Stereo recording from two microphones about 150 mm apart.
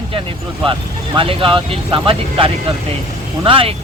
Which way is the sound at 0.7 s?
35° right (ahead or behind).